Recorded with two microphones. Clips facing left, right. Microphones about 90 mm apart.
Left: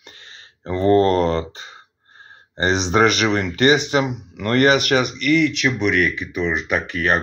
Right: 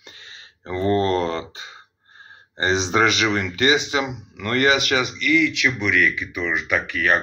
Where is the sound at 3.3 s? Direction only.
45° left (ahead or behind).